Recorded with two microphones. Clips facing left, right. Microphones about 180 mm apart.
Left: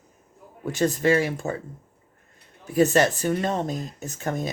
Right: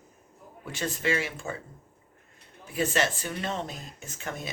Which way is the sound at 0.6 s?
40° left (ahead or behind).